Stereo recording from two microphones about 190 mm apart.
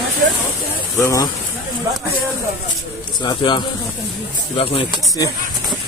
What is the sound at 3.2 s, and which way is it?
Speech, 25° left (ahead or behind).